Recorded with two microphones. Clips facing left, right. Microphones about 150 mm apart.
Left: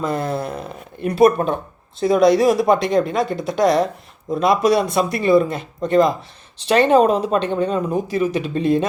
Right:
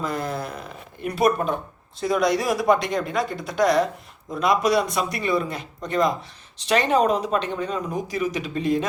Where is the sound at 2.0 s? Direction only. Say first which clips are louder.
Left 8 dB; 25° left (ahead or behind).